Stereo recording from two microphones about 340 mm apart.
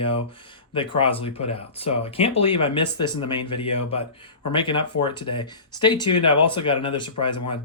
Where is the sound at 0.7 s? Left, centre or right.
Centre.